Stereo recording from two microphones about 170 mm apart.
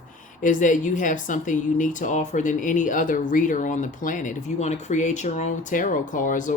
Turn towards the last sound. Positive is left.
turn(degrees=50)  # may be behind; listen again after turning